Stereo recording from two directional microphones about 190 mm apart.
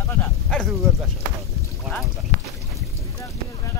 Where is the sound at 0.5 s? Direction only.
Centre (ahead or behind).